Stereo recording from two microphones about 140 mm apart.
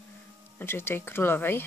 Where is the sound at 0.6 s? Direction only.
15° left (ahead or behind).